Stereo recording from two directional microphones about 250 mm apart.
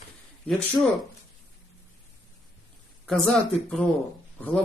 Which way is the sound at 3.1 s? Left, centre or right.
Centre.